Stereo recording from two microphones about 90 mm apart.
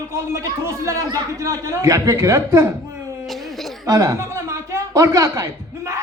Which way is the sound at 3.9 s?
35° right (ahead or behind).